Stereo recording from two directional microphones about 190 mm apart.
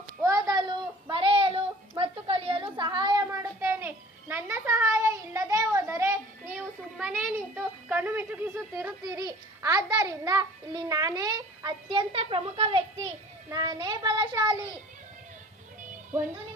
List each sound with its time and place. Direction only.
0.2 s child singing: 15° right (ahead or behind)
13.5 s child singing: 20° right (ahead or behind)